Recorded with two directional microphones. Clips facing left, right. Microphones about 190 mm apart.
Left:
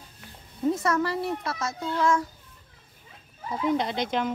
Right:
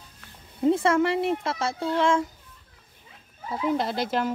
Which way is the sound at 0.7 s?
25° right (ahead or behind).